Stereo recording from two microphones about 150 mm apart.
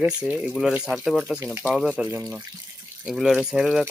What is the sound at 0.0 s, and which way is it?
Speech, 10° right (ahead or behind).